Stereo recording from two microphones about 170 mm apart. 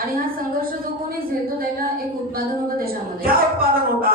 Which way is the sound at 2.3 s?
60° right (ahead or behind).